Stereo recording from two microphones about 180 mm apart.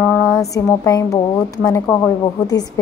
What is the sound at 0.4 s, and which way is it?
A woman's voice, 15° left (ahead or behind).